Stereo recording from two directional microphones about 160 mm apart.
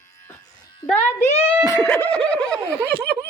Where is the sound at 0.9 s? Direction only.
45° left (ahead or behind).